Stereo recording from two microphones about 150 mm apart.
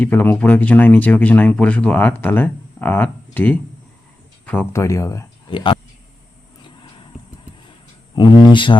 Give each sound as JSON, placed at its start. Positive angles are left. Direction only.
{"t": 0.0, "sound": "speech", "side_deg": 15}
{"t": 4.7, "sound": "speech", "side_deg": 20}
{"t": 5.5, "sound": "speech", "side_deg": 35}
{"t": 8.1, "sound": "speech", "side_deg": 30}